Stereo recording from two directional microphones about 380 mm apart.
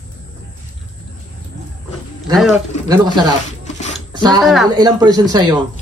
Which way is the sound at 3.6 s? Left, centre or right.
Centre.